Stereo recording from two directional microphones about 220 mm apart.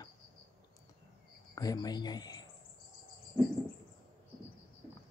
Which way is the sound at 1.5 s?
15° left (ahead or behind).